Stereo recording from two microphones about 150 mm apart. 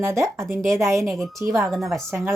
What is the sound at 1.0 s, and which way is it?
Speech, centre (ahead or behind).